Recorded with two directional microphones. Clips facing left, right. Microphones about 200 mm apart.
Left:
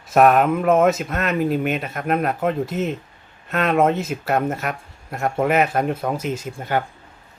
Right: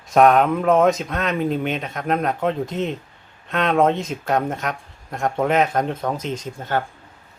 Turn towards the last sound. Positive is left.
turn(degrees=10)  # may be behind; listen again after turning